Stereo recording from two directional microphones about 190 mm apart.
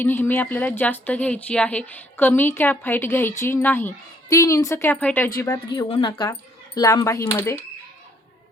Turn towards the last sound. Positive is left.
turn(degrees=15)  # may be behind; listen again after turning